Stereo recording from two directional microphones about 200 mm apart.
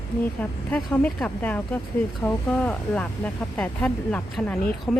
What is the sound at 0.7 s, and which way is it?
Speech, 5° left (ahead or behind).